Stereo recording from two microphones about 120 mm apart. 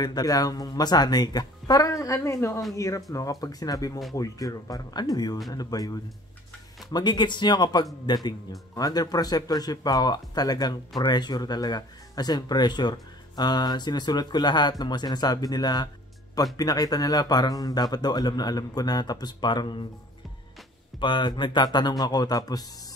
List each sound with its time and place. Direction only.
0.0 s speech: 35° left (ahead or behind)
21.0 s speech: 40° left (ahead or behind)